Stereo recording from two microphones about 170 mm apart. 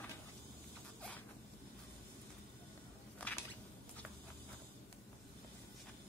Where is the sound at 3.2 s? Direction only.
10° left (ahead or behind).